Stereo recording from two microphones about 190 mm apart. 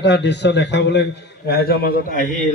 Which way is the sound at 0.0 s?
65° left (ahead or behind).